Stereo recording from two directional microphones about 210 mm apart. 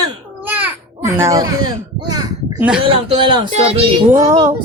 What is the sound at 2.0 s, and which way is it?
Speech, 20° right (ahead or behind).